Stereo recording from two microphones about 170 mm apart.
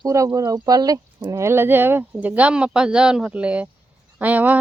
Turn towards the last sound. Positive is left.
turn(degrees=-10)  # may be behind; listen again after turning